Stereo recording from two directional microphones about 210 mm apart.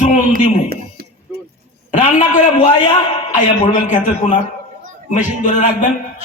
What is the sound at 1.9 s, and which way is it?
Speech, 35° left (ahead or behind).